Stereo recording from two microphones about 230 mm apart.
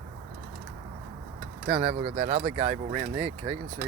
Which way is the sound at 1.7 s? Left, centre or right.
Right.